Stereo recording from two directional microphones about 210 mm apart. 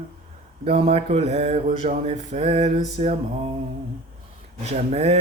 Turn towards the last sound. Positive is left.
turn(degrees=-30)  # may be behind; listen again after turning